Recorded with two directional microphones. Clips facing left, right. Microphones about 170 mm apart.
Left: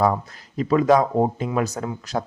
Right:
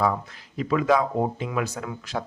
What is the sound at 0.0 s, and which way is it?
Speech, 40° left (ahead or behind).